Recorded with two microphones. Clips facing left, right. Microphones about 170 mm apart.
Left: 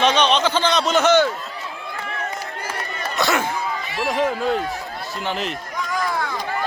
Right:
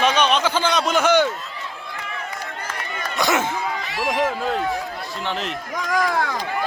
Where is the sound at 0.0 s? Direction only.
5° right (ahead or behind).